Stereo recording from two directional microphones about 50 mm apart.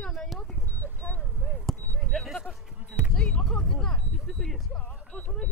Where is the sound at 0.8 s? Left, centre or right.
Left.